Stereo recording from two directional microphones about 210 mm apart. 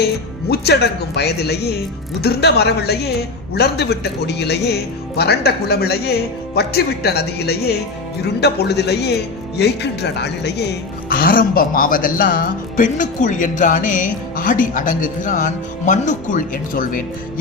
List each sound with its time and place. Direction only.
0.0 s speech: 50° left (ahead or behind)